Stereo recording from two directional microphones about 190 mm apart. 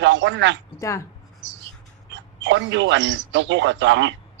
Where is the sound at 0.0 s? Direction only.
70° right (ahead or behind).